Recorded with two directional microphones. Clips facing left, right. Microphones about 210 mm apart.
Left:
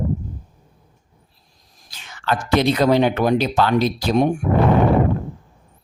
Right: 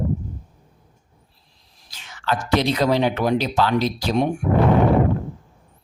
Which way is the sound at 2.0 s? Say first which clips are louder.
Left 1 dB; 55° left (ahead or behind).